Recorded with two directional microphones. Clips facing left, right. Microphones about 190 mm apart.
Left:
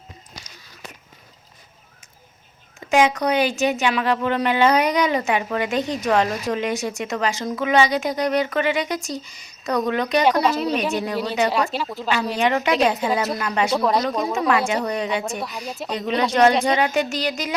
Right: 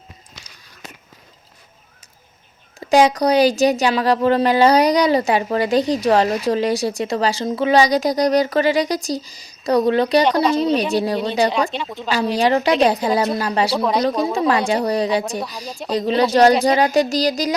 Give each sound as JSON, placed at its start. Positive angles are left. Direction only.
{"t": 2.9, "sound": "a woman's voice", "side_deg": -35}
{"t": 11.7, "sound": "speech", "side_deg": 5}
{"t": 12.0, "sound": "a woman's voice", "side_deg": -35}
{"t": 13.7, "sound": "speech", "side_deg": 0}
{"t": 14.3, "sound": "a woman's voice", "side_deg": -35}